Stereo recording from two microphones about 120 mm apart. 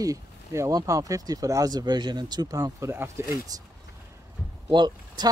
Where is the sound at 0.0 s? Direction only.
25° right (ahead or behind).